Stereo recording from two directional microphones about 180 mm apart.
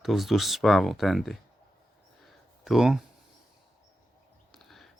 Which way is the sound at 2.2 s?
Centre (ahead or behind).